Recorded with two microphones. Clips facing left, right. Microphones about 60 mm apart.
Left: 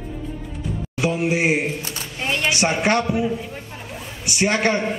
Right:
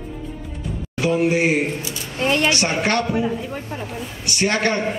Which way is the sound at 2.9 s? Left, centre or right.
Centre.